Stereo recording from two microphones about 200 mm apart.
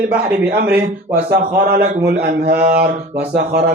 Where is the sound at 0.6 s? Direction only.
55° right (ahead or behind).